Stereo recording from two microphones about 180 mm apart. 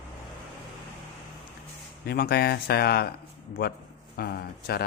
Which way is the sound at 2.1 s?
60° left (ahead or behind).